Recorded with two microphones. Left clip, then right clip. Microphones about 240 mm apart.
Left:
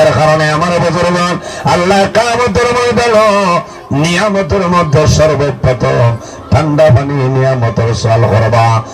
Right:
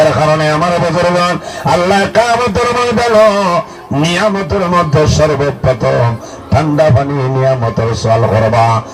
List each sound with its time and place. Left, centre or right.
0.0 s a sound: left
4.0 s speech: left
8.3 s speech: left